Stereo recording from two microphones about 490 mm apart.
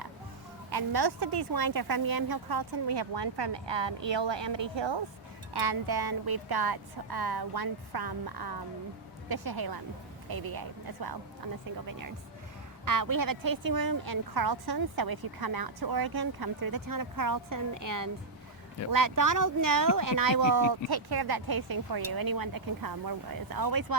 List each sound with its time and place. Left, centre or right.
0.7 s speech: right
5.5 s speech: right
12.8 s speech: right